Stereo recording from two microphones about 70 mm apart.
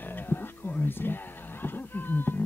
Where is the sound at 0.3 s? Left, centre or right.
Left.